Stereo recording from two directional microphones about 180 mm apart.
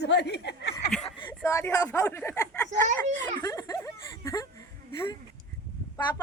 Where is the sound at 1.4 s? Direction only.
15° left (ahead or behind).